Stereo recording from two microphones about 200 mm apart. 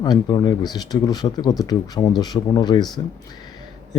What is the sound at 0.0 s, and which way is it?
Speech, 20° left (ahead or behind).